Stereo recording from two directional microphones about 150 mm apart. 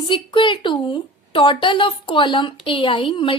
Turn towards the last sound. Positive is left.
turn(degrees=35)  # may be behind; listen again after turning